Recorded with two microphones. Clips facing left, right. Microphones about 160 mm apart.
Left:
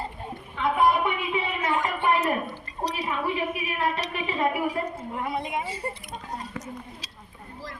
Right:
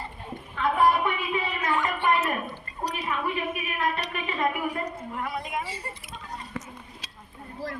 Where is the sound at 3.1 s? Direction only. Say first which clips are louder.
Even; 25° left (ahead or behind).